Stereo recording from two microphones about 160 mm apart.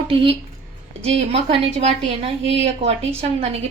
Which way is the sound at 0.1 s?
35° right (ahead or behind).